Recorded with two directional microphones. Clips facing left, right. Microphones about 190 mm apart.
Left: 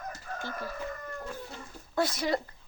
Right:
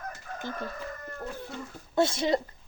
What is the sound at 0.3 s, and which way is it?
Chicken, 20° right (ahead or behind).